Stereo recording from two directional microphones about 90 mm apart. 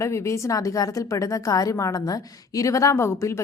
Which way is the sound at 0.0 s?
30° left (ahead or behind).